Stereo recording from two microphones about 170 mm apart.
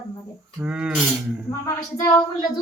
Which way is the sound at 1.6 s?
20° left (ahead or behind).